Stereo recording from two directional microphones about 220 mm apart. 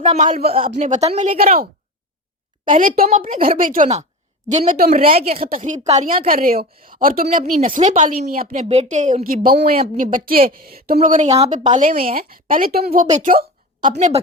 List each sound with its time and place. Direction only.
0.0 s speech: 25° right (ahead or behind)
0.3 s a woman's voice: 40° right (ahead or behind)
0.6 s a woman's voice: 30° right (ahead or behind)
2.7 s a woman's voice: 40° right (ahead or behind)